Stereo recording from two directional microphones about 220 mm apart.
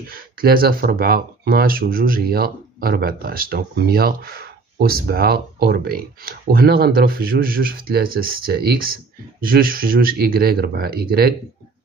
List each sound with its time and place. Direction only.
0.1 s speech: 40° right (ahead or behind)